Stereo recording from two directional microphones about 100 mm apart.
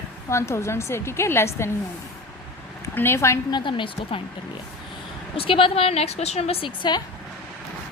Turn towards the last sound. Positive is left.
turn(degrees=80)